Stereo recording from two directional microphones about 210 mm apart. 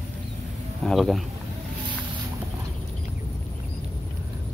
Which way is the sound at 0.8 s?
Centre (ahead or behind).